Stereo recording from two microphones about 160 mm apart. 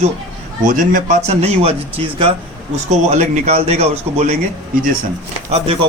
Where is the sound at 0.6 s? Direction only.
55° right (ahead or behind).